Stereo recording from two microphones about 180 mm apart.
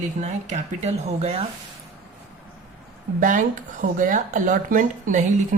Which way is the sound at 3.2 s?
45° right (ahead or behind).